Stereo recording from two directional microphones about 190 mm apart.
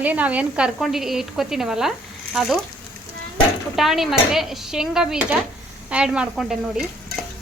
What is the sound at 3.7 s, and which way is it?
Speech, centre (ahead or behind).